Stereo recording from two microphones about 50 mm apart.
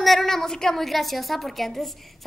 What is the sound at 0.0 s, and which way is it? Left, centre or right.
A woman's voice, centre.